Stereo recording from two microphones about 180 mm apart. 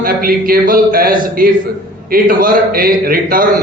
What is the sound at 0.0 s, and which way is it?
A man's voice, 55° right (ahead or behind).